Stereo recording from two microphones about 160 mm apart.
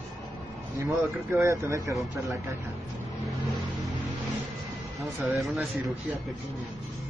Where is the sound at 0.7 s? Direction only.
20° right (ahead or behind).